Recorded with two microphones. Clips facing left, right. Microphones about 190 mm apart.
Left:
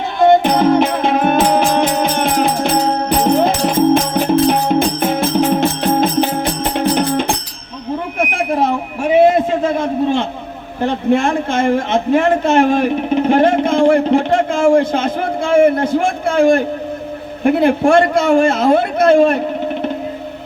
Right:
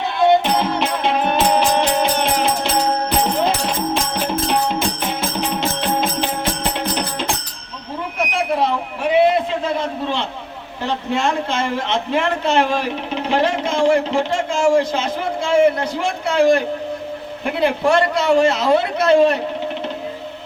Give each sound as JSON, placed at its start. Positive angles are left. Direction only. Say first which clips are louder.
{"t": 0.2, "sound": "music", "louder": "left 5 dB", "side_deg": 45}
{"t": 3.9, "sound": "music", "louder": "left 8 dB", "side_deg": 50}
{"t": 8.2, "sound": "a sound", "louder": "left 2 dB", "side_deg": 50}
{"t": 10.8, "sound": "a man's voice", "louder": "left 7 dB", "side_deg": 55}